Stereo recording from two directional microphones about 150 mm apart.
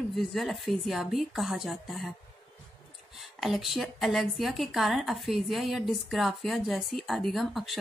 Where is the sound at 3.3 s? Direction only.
Centre (ahead or behind).